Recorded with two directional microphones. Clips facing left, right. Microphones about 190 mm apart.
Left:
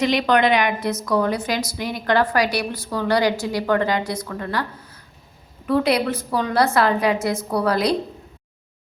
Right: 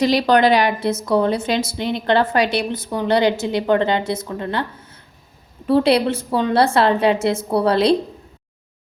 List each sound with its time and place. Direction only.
0.0 s a woman's voice: 35° right (ahead or behind)